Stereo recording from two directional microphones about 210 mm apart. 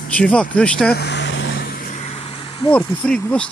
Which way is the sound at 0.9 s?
50° left (ahead or behind).